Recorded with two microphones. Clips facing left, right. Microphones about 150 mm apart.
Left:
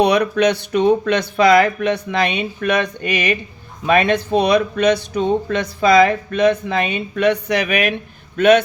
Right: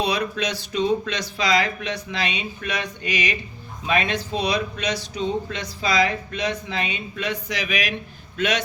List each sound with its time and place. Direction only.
0.0 s speech: 65° left (ahead or behind)